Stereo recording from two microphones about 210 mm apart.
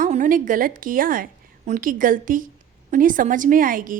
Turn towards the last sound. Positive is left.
turn(degrees=-40)  # may be behind; listen again after turning